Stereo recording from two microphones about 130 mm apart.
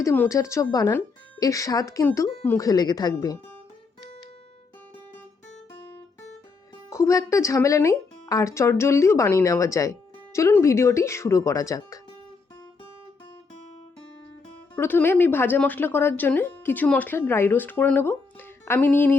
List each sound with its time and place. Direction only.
0.0 s speech: 20° left (ahead or behind)
6.9 s speech: 25° left (ahead or behind)
14.8 s speech: 15° left (ahead or behind)